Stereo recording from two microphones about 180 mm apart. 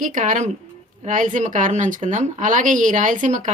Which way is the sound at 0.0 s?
45° right (ahead or behind).